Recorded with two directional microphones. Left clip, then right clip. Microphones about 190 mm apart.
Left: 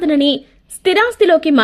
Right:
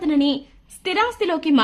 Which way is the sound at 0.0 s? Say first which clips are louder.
Left 6 dB; 20° left (ahead or behind).